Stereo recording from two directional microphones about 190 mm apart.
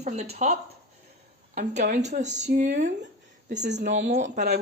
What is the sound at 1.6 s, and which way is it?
Speech, 40° right (ahead or behind).